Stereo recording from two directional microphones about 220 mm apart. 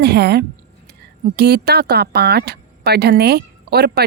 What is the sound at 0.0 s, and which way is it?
Speech, 50° right (ahead or behind).